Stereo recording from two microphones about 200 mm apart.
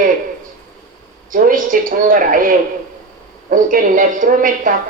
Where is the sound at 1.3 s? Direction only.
40° right (ahead or behind).